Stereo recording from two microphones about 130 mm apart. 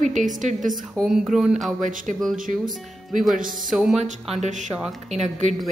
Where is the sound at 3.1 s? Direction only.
Centre (ahead or behind).